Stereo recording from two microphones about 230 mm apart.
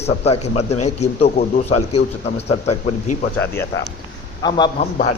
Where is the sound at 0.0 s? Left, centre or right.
Left.